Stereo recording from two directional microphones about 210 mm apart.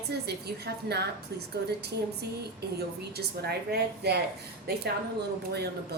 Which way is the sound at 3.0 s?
50° right (ahead or behind).